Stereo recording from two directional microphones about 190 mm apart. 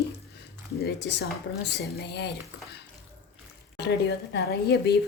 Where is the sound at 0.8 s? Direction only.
65° left (ahead or behind).